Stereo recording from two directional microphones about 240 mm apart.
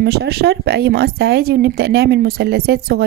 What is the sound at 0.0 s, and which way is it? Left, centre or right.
A woman's voice, right.